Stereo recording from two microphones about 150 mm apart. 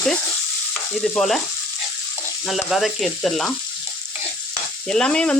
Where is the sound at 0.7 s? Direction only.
Centre (ahead or behind).